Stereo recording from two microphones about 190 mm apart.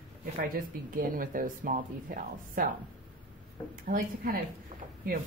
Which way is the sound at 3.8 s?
45° right (ahead or behind).